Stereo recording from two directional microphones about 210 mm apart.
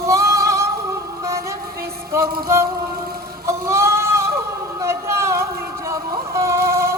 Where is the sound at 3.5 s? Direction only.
15° right (ahead or behind).